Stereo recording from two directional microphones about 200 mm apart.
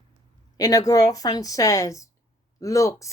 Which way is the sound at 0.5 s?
20° left (ahead or behind).